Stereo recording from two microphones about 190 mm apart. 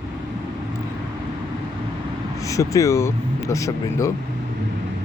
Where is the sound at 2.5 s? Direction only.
15° left (ahead or behind).